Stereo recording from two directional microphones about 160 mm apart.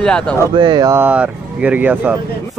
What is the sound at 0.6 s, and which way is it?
Speech, 25° right (ahead or behind).